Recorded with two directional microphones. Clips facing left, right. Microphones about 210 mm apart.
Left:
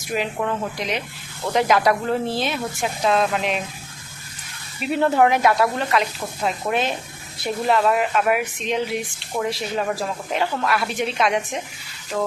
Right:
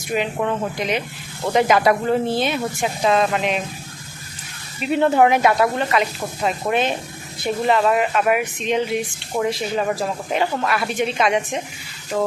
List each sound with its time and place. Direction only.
0.1 s speech: centre (ahead or behind)
4.8 s speech: centre (ahead or behind)
12.1 s a sound: 15° right (ahead or behind)